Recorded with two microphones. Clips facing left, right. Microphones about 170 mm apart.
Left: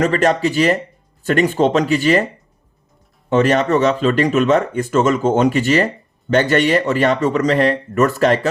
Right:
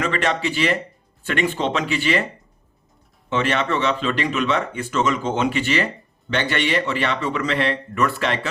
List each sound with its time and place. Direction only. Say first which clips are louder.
0.0 s speech: left 7 dB; 40° left (ahead or behind)
3.2 s speech: left 7 dB; 40° left (ahead or behind)